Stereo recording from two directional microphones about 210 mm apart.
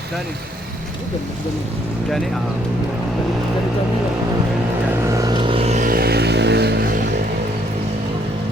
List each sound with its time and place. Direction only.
5.1 s vehicle: 20° right (ahead or behind); by 6.8 s 50° right (ahead or behind)